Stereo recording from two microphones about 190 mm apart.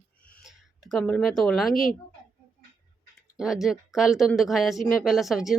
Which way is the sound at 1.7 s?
45° left (ahead or behind).